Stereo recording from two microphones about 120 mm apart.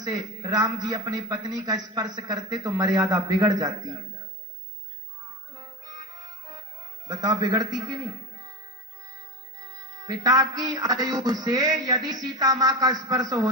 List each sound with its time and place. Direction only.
0.0 s a man's voice: 30° right (ahead or behind)
5.5 s music: 35° right (ahead or behind)
7.1 s a man's voice: 35° right (ahead or behind)
9.7 s a man's voice: 30° right (ahead or behind)